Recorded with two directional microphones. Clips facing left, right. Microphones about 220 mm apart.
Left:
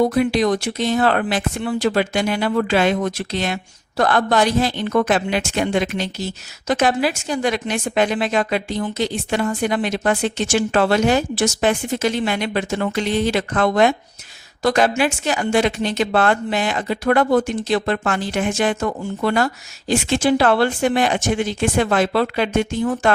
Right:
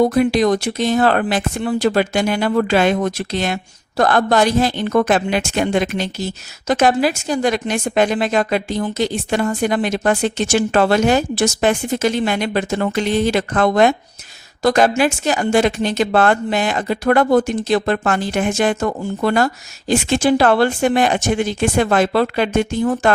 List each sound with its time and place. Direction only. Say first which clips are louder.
0.0 s a woman's voice: right 3 dB; 45° right (ahead or behind)